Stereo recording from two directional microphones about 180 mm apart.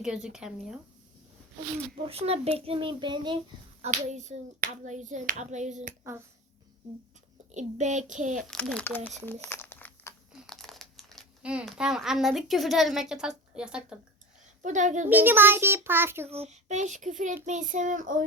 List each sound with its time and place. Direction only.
0.0 s speech: 5° right (ahead or behind)
2.0 s clapping: 35° right (ahead or behind)
2.6 s child singing: 30° right (ahead or behind)
3.8 s clapping: 40° right (ahead or behind)
7.5 s a child's voice: 40° right (ahead or behind)
8.4 s a child's voice: 5° left (ahead or behind)
9.0 s crumpling: 10° left (ahead or behind)
10.4 s speech: centre (ahead or behind)
14.6 s a child's voice: 45° right (ahead or behind)
15.1 s a child's voice: 10° right (ahead or behind)
16.2 s a child's voice: 35° right (ahead or behind)